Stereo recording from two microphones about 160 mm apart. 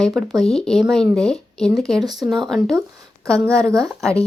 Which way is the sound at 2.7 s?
20° right (ahead or behind).